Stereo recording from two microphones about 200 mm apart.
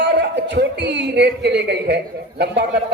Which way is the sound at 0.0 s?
60° right (ahead or behind).